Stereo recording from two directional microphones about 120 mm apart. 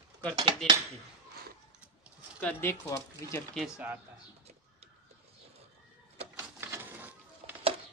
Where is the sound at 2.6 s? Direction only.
20° left (ahead or behind).